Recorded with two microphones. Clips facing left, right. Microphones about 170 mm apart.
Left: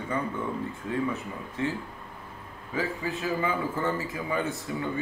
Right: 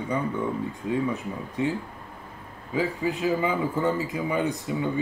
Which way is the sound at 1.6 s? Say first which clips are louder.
Right 3 dB; 15° right (ahead or behind).